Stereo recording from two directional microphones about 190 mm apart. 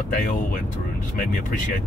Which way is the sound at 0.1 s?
45° left (ahead or behind).